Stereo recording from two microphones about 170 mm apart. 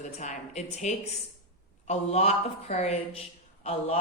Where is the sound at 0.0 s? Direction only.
45° left (ahead or behind).